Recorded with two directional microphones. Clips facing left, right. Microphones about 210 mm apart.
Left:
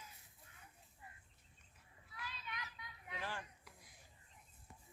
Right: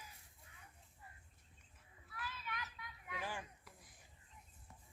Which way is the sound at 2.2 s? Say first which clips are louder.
Right 3 dB; 20° left (ahead or behind).